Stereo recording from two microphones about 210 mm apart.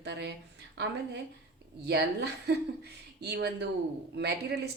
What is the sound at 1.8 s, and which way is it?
Speech, 50° right (ahead or behind).